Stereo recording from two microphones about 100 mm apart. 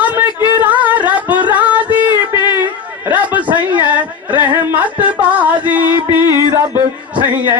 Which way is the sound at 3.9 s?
15° right (ahead or behind).